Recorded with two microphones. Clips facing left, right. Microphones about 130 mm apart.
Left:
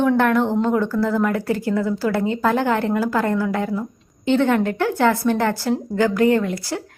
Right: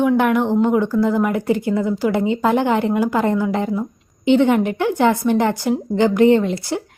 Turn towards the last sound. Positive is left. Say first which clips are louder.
# right 4 dB
turn(degrees=-20)  # may be behind; listen again after turning